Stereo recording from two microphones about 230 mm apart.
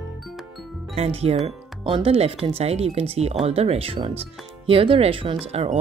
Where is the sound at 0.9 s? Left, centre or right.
Right.